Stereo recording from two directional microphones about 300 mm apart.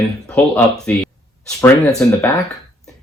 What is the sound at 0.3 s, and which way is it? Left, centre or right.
Speech, centre.